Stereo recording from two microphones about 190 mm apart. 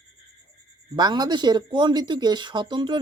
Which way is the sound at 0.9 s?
20° right (ahead or behind).